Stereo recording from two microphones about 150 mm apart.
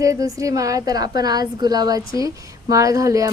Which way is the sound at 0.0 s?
20° right (ahead or behind).